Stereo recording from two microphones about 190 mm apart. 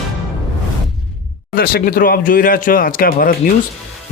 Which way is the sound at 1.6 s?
50° left (ahead or behind).